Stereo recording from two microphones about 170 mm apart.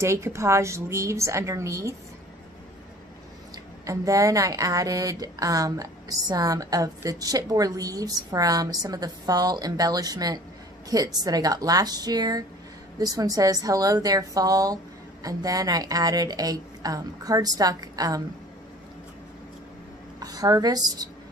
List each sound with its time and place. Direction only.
0.0 s a woman's voice: 15° right (ahead or behind)
3.5 s a woman's voice: 20° right (ahead or behind)
20.2 s speech: 20° right (ahead or behind)